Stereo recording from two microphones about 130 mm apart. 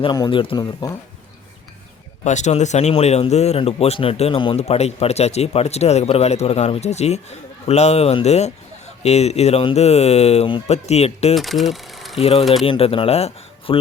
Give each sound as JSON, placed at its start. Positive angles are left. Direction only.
{"t": 0.0, "sound": "speech", "side_deg": 35}
{"t": 2.2, "sound": "speech", "side_deg": 65}
{"t": 4.6, "sound": "speech", "side_deg": 55}
{"t": 11.3, "sound": "speech", "side_deg": 0}
{"t": 12.1, "sound": "speech", "side_deg": 50}